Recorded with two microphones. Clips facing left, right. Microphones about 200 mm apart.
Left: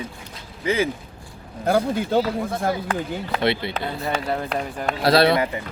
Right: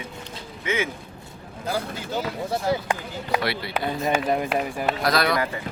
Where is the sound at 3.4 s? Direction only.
25° left (ahead or behind).